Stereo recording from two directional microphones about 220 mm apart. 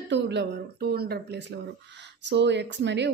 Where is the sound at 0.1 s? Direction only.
50° right (ahead or behind).